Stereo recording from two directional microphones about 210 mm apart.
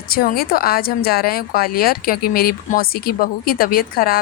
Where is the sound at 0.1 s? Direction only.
45° left (ahead or behind).